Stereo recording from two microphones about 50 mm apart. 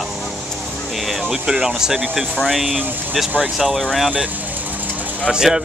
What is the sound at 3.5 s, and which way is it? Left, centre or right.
Speech, centre.